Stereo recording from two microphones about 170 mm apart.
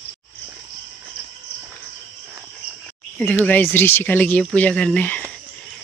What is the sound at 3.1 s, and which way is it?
Speech, 10° left (ahead or behind).